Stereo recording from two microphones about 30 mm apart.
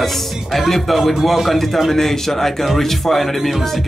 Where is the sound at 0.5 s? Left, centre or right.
Centre.